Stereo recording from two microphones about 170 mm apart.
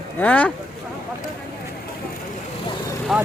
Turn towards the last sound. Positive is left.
turn(degrees=0)  # may be behind; listen again after turning